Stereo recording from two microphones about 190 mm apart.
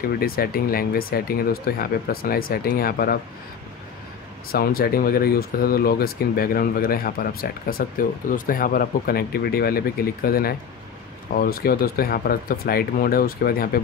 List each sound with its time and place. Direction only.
0.0 s speech: 50° left (ahead or behind)
4.5 s speech: 50° left (ahead or behind)